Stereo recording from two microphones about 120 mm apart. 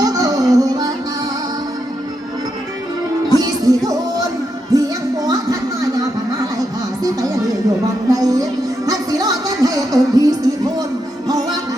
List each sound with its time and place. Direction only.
0.0 s music: 30° right (ahead or behind)
3.2 s music: 30° right (ahead or behind)